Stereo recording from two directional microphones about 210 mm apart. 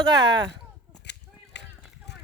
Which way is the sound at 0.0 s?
20° right (ahead or behind).